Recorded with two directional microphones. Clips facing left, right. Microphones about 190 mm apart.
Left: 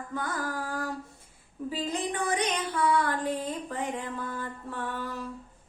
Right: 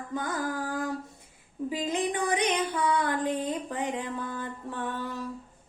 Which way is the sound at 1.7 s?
15° right (ahead or behind).